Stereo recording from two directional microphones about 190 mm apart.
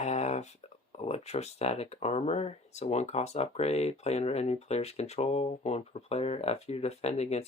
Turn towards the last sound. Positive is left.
turn(degrees=35)  # may be behind; listen again after turning